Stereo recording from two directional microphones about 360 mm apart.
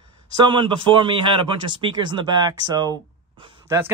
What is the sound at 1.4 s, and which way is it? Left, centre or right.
Speech, centre.